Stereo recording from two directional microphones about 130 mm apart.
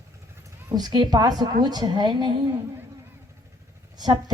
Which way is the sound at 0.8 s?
35° right (ahead or behind).